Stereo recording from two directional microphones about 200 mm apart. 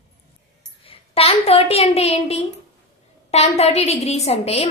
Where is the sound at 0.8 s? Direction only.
30° left (ahead or behind).